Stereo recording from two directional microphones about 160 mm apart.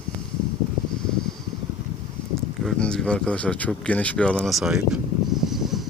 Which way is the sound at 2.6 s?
5° left (ahead or behind).